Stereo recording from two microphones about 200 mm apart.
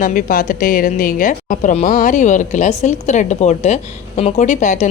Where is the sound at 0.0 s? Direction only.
40° left (ahead or behind).